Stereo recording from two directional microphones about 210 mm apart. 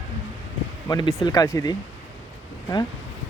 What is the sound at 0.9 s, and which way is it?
Speech, 20° left (ahead or behind).